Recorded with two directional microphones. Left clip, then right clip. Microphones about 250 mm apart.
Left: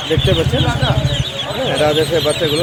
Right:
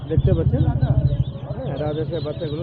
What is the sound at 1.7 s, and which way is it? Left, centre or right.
Speech, centre.